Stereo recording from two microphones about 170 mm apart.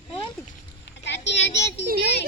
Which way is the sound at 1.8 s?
65° right (ahead or behind).